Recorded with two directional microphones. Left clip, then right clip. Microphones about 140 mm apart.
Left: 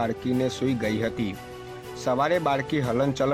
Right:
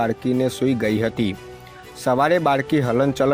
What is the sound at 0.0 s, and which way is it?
Speech, 30° right (ahead or behind).